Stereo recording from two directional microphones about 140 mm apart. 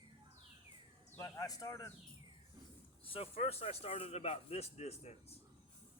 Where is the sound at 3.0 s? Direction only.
40° left (ahead or behind).